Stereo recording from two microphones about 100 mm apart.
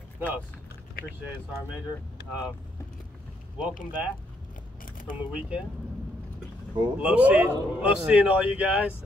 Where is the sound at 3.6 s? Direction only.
15° right (ahead or behind).